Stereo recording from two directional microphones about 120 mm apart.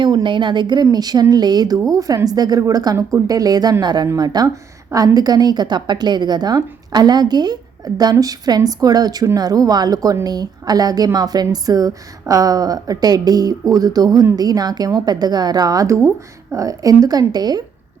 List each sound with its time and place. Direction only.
0.0 s a woman's voice: 40° right (ahead or behind)